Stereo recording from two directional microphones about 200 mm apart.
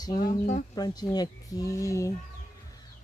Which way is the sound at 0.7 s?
20° left (ahead or behind).